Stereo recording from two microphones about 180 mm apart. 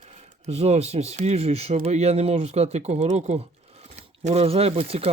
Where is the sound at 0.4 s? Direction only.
35° right (ahead or behind).